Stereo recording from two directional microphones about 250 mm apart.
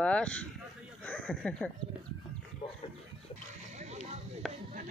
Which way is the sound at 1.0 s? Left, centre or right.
Centre.